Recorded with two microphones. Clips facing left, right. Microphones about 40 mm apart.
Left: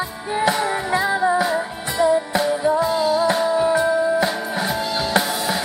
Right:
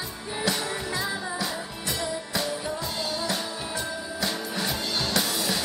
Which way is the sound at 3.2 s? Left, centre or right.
Left.